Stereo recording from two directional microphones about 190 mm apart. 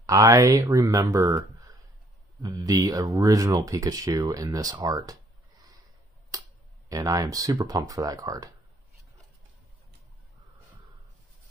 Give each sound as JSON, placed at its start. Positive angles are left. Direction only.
{"t": 0.0, "sound": "speech", "side_deg": -20}
{"t": 6.3, "sound": "a sound", "side_deg": -20}
{"t": 6.9, "sound": "speech", "side_deg": -20}